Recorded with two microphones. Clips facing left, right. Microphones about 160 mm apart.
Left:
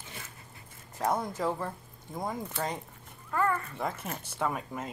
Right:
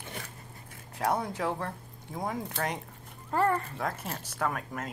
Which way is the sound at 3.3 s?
30° right (ahead or behind).